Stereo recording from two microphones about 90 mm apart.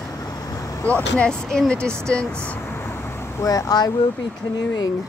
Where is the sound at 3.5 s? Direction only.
45° left (ahead or behind).